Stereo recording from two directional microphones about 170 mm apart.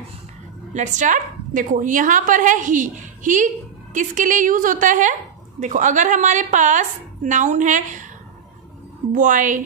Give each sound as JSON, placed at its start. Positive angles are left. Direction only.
{"t": 0.7, "sound": "speech", "side_deg": -45}
{"t": 9.1, "sound": "speech", "side_deg": -50}